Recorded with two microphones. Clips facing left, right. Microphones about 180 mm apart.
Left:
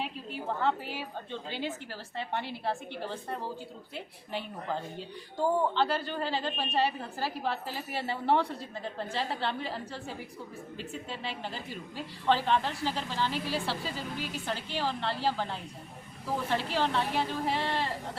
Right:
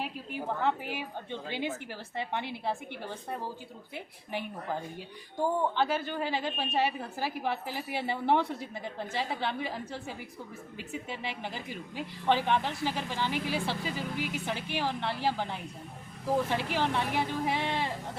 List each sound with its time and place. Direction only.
0.0 s a woman's voice: 15° right (ahead or behind)